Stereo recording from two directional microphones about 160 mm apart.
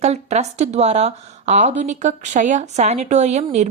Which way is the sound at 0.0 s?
45° right (ahead or behind).